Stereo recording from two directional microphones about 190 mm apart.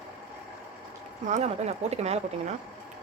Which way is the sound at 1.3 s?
35° right (ahead or behind).